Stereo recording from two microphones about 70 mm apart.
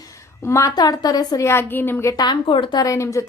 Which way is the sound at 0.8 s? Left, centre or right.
Left.